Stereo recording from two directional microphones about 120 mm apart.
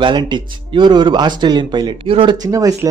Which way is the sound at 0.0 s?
40° right (ahead or behind).